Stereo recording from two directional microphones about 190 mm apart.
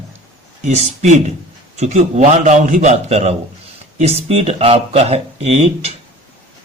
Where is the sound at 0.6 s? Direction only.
40° right (ahead or behind).